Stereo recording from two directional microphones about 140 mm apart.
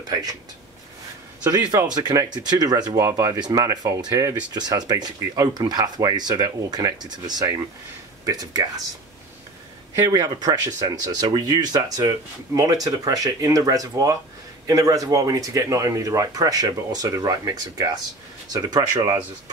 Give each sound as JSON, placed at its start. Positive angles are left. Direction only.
{"t": 0.1, "sound": "speech", "side_deg": -25}
{"t": 1.7, "sound": "speech", "side_deg": -20}
{"t": 10.0, "sound": "speech", "side_deg": -25}